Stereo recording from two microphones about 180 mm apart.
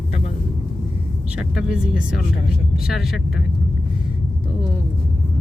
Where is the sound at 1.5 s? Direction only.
5° right (ahead or behind).